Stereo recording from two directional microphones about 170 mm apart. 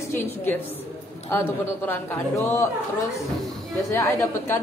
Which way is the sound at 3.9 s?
15° left (ahead or behind).